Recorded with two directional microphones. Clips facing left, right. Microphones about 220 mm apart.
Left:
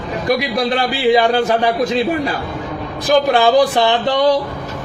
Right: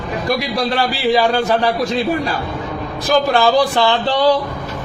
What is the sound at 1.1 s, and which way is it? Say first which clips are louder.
Speech: left 2 dB; 20° left (ahead or behind).